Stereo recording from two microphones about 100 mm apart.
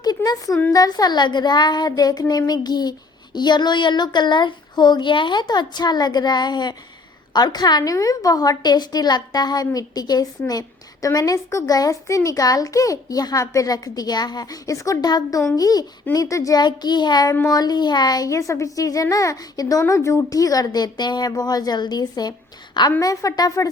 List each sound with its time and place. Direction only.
0.0 s a sound: 45° left (ahead or behind)
0.7 s child singing: 40° left (ahead or behind)
7.3 s a woman's voice: 45° left (ahead or behind)
16.1 s child singing: 35° left (ahead or behind)
17.5 s a woman's voice: 40° left (ahead or behind)